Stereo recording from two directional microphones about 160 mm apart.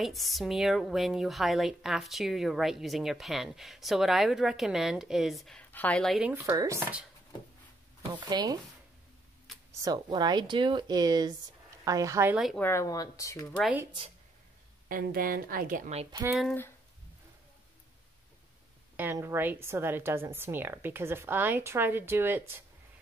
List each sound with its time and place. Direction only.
0.0 s a woman's voice: centre (ahead or behind)
6.3 s a woman's voice: 20° right (ahead or behind)
8.1 s speech: 30° right (ahead or behind)
9.7 s a sound: 20° right (ahead or behind)
9.9 s speech: 25° right (ahead or behind)
12.5 s speech: 15° left (ahead or behind)
14.9 s a woman's voice: 60° right (ahead or behind)
18.9 s a woman's voice: 15° right (ahead or behind)